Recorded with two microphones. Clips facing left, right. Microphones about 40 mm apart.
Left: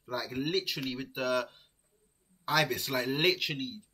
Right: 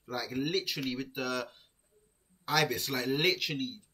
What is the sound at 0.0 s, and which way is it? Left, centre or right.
Speech, centre.